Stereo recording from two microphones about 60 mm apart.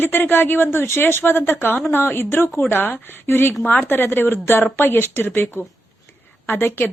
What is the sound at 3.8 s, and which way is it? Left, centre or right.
Speech, left.